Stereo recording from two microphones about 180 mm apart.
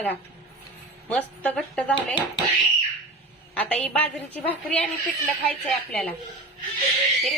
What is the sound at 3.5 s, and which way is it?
A woman's voice, 5° left (ahead or behind).